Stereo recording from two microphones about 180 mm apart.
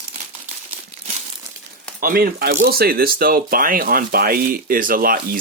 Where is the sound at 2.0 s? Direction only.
55° right (ahead or behind).